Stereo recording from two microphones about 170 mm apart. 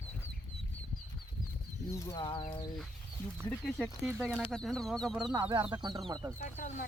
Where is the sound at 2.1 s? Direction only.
30° left (ahead or behind).